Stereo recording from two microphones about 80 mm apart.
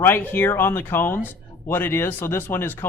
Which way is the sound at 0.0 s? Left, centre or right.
Left.